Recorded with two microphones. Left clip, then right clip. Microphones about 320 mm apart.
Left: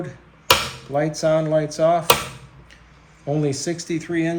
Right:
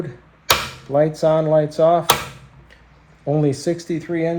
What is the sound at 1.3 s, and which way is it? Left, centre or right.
Speech, centre.